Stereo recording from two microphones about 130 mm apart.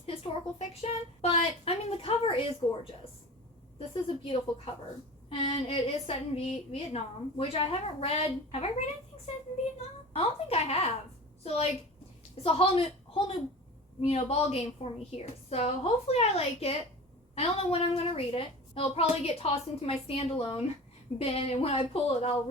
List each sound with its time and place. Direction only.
0.0 s a woman's voice: 50° left (ahead or behind)
2.6 s a woman's voice: 15° left (ahead or behind)
3.8 s a woman's voice: 40° left (ahead or behind)
10.2 s a woman's voice: 50° left (ahead or behind)